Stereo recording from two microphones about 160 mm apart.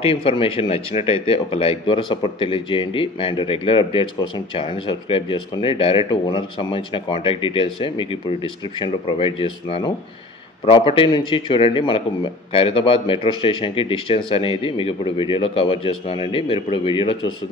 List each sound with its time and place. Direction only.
0.0 s speech: 35° left (ahead or behind)